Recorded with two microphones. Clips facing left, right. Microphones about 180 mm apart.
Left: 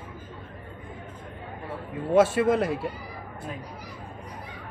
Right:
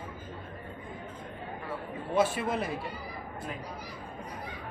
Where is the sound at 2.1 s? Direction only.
90° left.